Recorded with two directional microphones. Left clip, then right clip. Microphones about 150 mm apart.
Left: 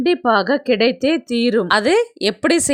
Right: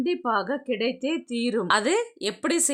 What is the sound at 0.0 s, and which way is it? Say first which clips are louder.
A woman's voice: left 10 dB; 40° left (ahead or behind).